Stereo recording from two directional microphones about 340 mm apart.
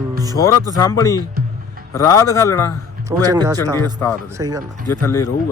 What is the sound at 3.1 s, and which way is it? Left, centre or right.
Speech, centre.